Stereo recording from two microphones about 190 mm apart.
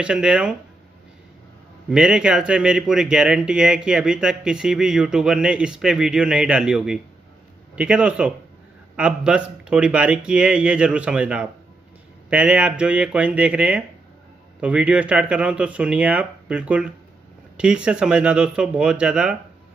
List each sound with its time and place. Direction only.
0.0 s speech: 5° right (ahead or behind)
1.9 s speech: 5° right (ahead or behind)